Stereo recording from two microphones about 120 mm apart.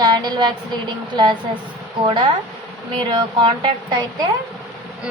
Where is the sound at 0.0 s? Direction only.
35° right (ahead or behind).